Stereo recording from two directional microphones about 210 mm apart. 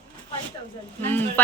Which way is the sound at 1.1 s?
10° left (ahead or behind).